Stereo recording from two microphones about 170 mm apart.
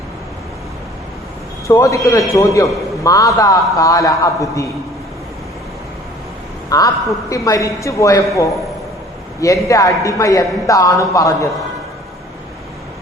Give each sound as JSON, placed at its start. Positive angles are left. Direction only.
{"t": 1.6, "sound": "a man's voice", "side_deg": 20}
{"t": 6.7, "sound": "a man's voice", "side_deg": 20}